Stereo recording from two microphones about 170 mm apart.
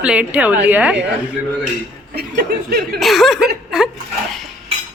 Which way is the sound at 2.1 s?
70° right (ahead or behind).